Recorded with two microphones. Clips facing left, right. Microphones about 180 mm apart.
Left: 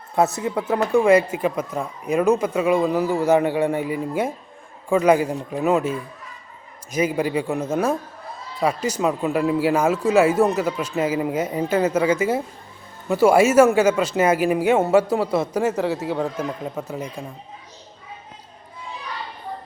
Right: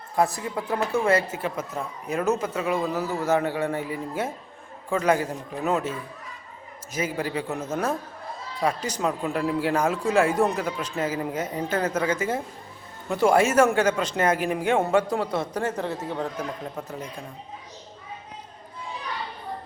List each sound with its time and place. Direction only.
0.2 s speech: 25° left (ahead or behind)
6.9 s speech: 15° left (ahead or behind)